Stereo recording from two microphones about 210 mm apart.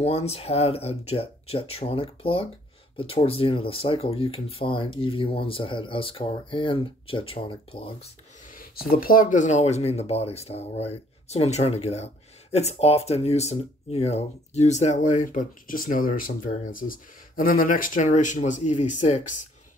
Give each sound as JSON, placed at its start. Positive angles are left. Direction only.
{"t": 0.0, "sound": "speech", "side_deg": 30}
{"t": 8.9, "sound": "speech", "side_deg": 40}